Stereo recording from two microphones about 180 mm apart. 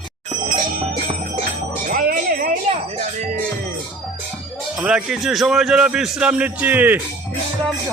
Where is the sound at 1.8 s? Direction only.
55° right (ahead or behind).